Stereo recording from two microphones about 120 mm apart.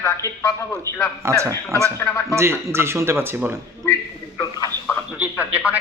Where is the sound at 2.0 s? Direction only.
25° left (ahead or behind).